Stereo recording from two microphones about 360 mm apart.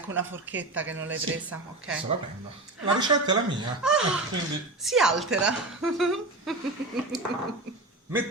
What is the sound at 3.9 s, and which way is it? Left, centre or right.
A woman's voice, centre.